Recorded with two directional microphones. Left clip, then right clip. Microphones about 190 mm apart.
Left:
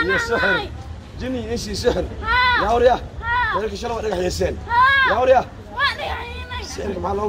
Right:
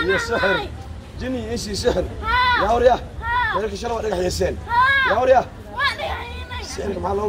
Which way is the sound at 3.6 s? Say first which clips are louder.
Even; 5° left (ahead or behind).